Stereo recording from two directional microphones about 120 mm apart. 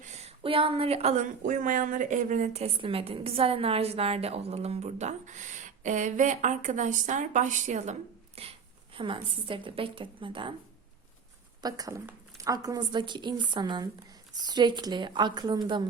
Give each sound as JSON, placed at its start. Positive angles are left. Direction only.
{"t": 0.0, "sound": "a woman's voice", "side_deg": -65}
{"t": 8.4, "sound": "speech", "side_deg": -60}
{"t": 9.0, "sound": "a woman's voice", "side_deg": -45}
{"t": 11.6, "sound": "speech", "side_deg": -30}